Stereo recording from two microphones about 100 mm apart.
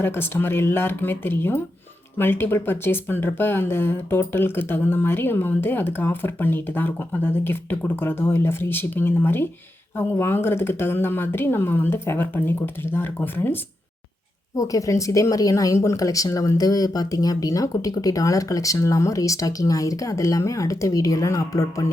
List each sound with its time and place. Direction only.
0.0 s speech: 20° left (ahead or behind)
14.5 s speech: 35° left (ahead or behind)